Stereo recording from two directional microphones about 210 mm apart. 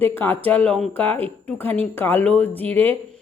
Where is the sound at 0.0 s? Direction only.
10° left (ahead or behind).